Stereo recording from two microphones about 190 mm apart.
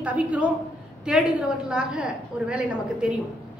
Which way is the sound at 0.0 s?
5° right (ahead or behind).